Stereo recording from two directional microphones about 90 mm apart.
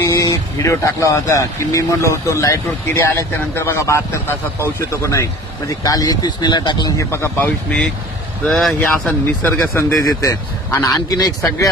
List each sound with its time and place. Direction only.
0.0 s speech: 35° left (ahead or behind); by 6.9 s 60° left (ahead or behind)
7.0 s speech: 30° left (ahead or behind)
7.4 s speech: 10° left (ahead or behind)
9.0 s speech: 20° left (ahead or behind)
10.2 s speech: 35° left (ahead or behind)